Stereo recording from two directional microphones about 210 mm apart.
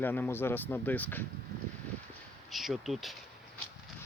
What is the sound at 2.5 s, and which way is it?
Speech, centre (ahead or behind).